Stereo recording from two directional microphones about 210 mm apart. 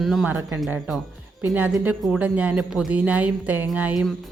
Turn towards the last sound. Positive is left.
turn(degrees=-5)  # may be behind; listen again after turning